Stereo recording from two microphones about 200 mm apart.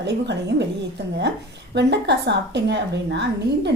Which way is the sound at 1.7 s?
60° right (ahead or behind).